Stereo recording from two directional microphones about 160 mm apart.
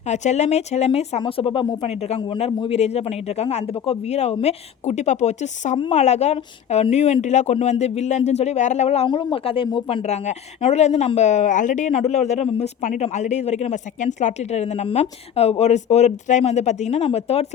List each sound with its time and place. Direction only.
0.1 s a woman's voice: 45° left (ahead or behind)